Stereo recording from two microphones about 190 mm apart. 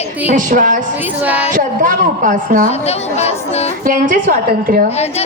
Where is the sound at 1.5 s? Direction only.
45° right (ahead or behind).